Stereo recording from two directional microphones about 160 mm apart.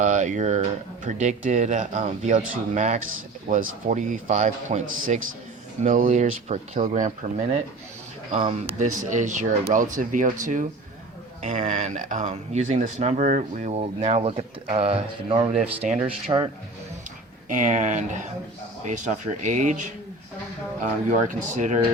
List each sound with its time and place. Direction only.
0.0 s speech: 50° right (ahead or behind)
8.4 s speech: 35° right (ahead or behind)
17.5 s speech: 50° right (ahead or behind)
20.8 s speech: 50° right (ahead or behind)